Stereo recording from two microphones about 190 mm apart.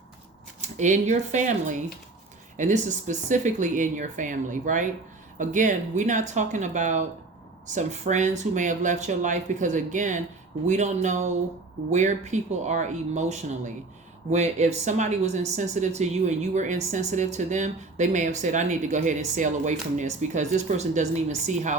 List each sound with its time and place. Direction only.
0.8 s speech: 40° right (ahead or behind)